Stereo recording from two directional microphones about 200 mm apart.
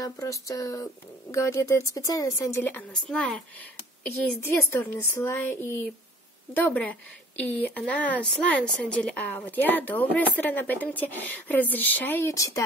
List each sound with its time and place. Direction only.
0.0 s a woman's voice: 15° left (ahead or behind)